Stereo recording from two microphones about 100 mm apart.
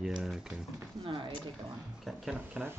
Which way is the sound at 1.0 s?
60° right (ahead or behind).